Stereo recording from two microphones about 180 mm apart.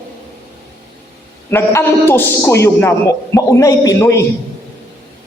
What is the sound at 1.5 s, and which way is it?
A woman's voice, 15° left (ahead or behind).